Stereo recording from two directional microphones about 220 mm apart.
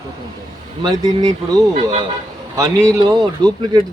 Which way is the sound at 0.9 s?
20° right (ahead or behind).